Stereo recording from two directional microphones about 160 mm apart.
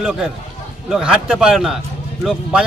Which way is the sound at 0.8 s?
5° right (ahead or behind).